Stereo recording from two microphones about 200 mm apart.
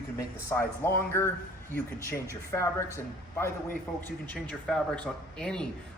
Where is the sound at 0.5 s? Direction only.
10° left (ahead or behind).